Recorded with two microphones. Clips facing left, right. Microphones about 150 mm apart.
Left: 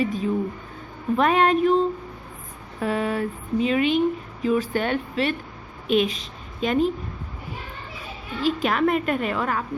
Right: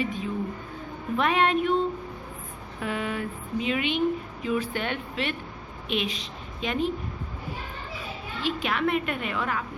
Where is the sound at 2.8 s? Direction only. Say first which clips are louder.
Left 6 dB; 40° left (ahead or behind).